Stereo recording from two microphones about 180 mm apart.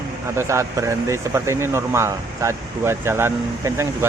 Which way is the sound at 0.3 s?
15° right (ahead or behind).